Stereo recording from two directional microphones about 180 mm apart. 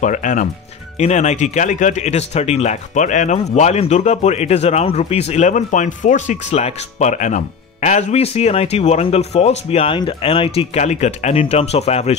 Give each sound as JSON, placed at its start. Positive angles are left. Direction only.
{"t": 0.0, "sound": "speech", "side_deg": 45}